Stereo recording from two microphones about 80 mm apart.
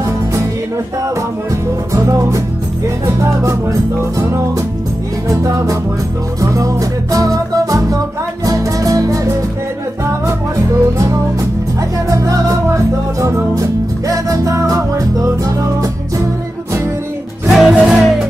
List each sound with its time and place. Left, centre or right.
0.0 s music: right
1.9 s music: right
17.5 s music: centre